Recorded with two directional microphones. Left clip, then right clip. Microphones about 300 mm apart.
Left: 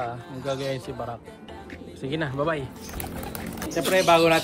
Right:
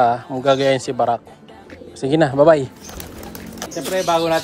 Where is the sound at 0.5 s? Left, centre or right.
Right.